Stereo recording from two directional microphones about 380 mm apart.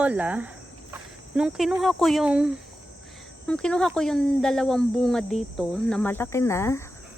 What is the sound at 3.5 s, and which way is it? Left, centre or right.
Speech, centre.